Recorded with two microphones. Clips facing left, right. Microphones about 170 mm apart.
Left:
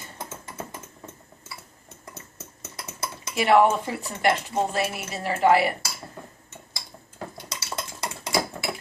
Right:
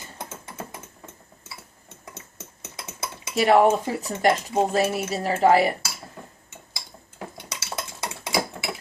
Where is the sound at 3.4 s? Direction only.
40° right (ahead or behind).